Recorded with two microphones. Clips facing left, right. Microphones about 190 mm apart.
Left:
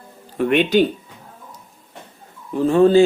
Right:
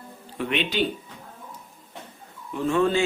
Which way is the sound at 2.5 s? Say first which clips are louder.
Left 9 dB; 35° left (ahead or behind).